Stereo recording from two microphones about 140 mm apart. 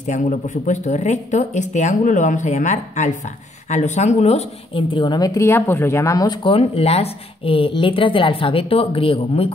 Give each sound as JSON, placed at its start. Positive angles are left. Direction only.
{"t": 0.0, "sound": "speech", "side_deg": 60}
{"t": 4.9, "sound": "speech", "side_deg": 30}